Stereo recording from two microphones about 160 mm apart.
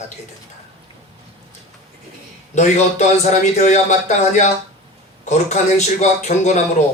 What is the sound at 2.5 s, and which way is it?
A man's voice, 45° left (ahead or behind).